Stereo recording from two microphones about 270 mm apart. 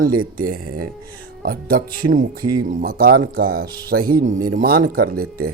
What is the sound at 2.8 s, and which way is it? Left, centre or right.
Speech, right.